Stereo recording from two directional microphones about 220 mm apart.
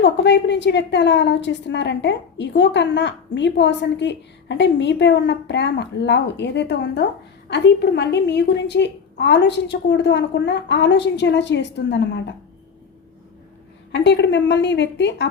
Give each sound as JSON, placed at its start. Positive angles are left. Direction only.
{"t": 0.0, "sound": "a woman's voice", "side_deg": 50}
{"t": 13.9, "sound": "a woman's voice", "side_deg": 55}